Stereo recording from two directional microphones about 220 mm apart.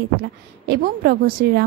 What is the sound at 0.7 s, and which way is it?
Speech, 45° right (ahead or behind).